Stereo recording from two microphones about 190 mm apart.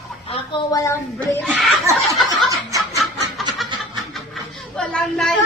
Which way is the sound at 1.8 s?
15° right (ahead or behind).